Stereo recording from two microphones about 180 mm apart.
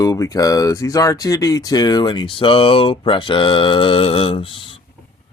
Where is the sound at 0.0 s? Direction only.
20° left (ahead or behind).